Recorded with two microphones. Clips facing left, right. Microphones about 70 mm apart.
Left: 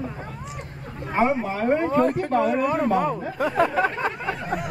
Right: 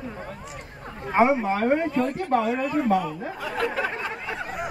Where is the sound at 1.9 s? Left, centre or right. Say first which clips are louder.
Left 3 dB; left.